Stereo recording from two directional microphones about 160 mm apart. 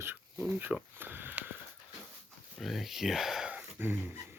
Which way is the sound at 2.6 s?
Centre (ahead or behind).